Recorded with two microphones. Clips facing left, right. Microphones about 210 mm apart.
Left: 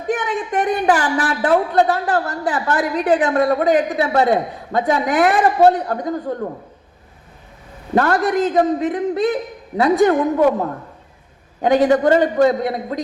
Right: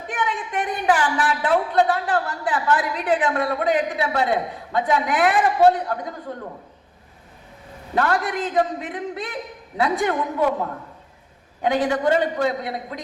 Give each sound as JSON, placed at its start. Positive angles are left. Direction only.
{"t": 0.1, "sound": "speech", "side_deg": 45}
{"t": 7.9, "sound": "speech", "side_deg": 45}
{"t": 11.6, "sound": "speech", "side_deg": 45}